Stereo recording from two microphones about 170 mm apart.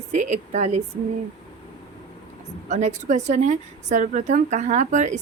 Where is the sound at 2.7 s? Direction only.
45° right (ahead or behind).